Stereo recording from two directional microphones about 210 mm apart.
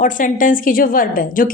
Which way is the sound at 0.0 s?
40° left (ahead or behind).